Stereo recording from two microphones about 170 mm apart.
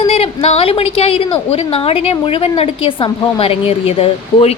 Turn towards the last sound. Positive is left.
turn(degrees=35)  # may be behind; listen again after turning